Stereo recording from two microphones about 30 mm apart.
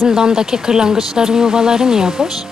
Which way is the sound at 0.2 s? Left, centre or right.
Centre.